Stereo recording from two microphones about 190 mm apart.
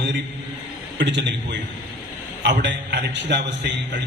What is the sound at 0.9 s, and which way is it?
A man's voice, 70° right (ahead or behind).